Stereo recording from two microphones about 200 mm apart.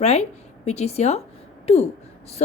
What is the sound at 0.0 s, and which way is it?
A woman's voice, 35° left (ahead or behind).